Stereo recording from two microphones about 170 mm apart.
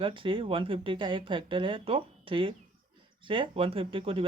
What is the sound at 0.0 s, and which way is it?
Speech, 30° right (ahead or behind).